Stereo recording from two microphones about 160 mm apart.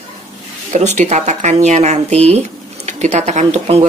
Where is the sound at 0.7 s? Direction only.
45° right (ahead or behind).